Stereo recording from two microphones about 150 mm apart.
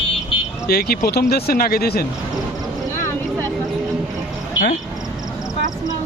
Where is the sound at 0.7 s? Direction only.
90° left.